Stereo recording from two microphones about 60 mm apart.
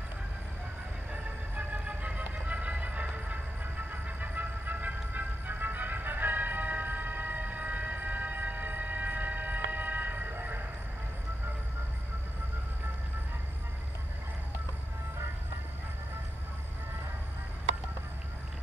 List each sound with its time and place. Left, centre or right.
1.1 s vehicle: right